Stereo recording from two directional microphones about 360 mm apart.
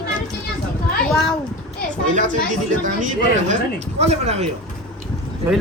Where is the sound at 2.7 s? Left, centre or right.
Right.